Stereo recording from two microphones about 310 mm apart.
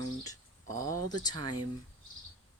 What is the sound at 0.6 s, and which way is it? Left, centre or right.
Speech, right.